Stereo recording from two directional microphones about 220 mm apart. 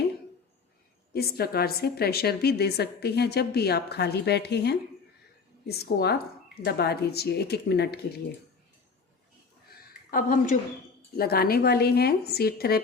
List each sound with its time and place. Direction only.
1.1 s a woman's voice: 45° left (ahead or behind)
9.6 s a sound: 40° left (ahead or behind)
11.2 s a woman's voice: 45° left (ahead or behind)